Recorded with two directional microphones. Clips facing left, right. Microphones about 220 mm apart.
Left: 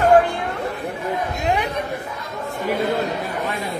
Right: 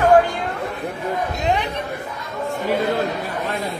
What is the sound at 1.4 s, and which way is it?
Speech, 10° left (ahead or behind).